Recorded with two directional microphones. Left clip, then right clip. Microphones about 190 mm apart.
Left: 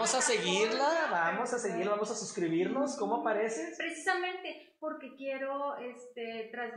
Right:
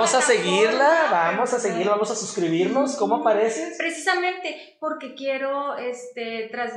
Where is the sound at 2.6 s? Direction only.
20° left (ahead or behind).